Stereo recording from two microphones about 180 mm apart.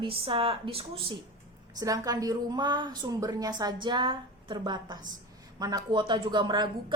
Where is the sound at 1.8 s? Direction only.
20° right (ahead or behind).